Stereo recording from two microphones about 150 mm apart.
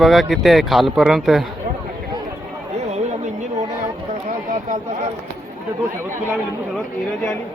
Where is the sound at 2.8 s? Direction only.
50° right (ahead or behind).